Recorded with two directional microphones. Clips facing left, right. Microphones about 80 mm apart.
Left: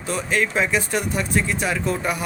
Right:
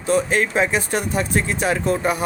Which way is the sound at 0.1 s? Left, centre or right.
Right.